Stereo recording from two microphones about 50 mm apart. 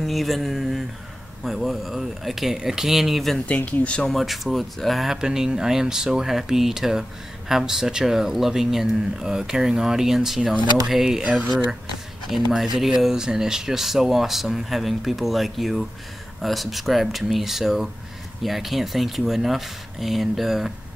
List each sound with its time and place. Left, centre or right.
0.0 s speech: centre
3.4 s speech: left
4.1 s speech: centre
12.3 s speech: centre